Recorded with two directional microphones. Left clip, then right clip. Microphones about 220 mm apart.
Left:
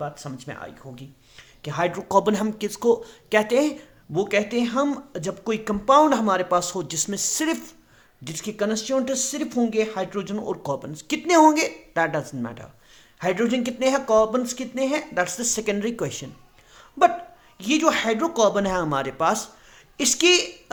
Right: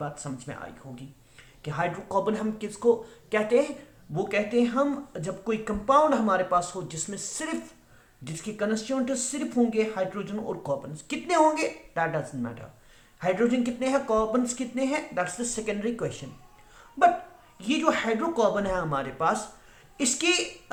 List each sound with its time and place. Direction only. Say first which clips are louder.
0.0 s speech: left 3 dB; 40° left (ahead or behind)
17.6 s speech: left 5 dB; 45° left (ahead or behind)